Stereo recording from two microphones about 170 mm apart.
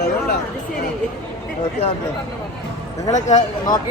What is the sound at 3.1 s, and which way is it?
Speech, 45° left (ahead or behind).